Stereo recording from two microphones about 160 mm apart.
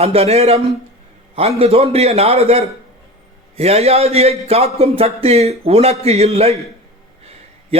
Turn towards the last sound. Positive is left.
turn(degrees=-40)  # may be behind; listen again after turning